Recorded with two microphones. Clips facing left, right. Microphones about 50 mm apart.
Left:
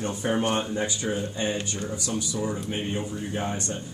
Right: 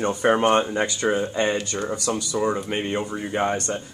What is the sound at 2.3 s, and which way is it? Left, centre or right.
Speech, right.